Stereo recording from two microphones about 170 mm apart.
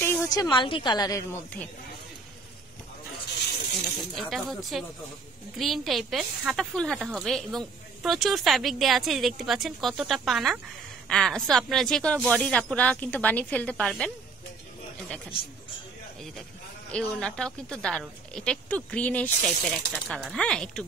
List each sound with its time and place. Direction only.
0.0 s speech: 15° left (ahead or behind)
4.1 s a woman's voice: centre (ahead or behind)
16.9 s speech: 5° left (ahead or behind)